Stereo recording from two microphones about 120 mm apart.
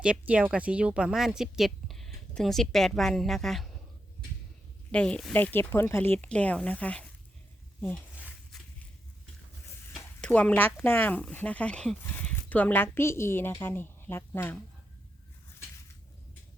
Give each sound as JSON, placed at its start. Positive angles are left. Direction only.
{"t": 0.0, "sound": "speech", "side_deg": -10}
{"t": 4.9, "sound": "speech", "side_deg": 10}
{"t": 9.9, "sound": "speech", "side_deg": 10}